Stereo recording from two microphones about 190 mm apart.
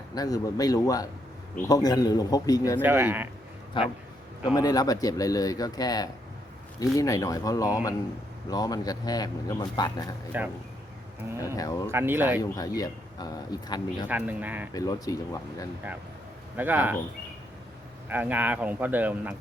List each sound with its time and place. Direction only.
0.1 s a man's voice: 20° left (ahead or behind)
2.8 s speech: 10° right (ahead or behind)
3.8 s a man's voice: 25° left (ahead or behind)
11.5 s speech: 20° left (ahead or behind)
11.9 s speech: 10° right (ahead or behind)
12.4 s a man's voice: 20° left (ahead or behind)
14.1 s speech: 10° right (ahead or behind)
14.7 s a man's voice: 20° left (ahead or behind)
16.6 s speech: 10° right (ahead or behind)
18.1 s speech: 10° right (ahead or behind)